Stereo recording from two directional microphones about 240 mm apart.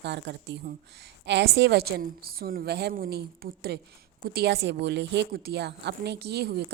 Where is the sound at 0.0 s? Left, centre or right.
Right.